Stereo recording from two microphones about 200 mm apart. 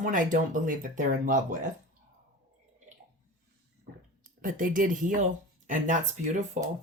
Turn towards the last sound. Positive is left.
turn(degrees=-35)  # may be behind; listen again after turning